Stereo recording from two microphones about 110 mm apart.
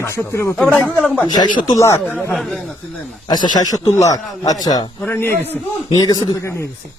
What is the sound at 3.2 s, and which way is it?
A man's voice, 40° left (ahead or behind).